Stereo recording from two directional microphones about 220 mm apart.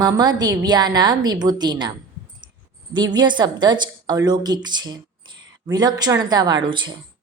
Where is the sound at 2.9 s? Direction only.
20° right (ahead or behind).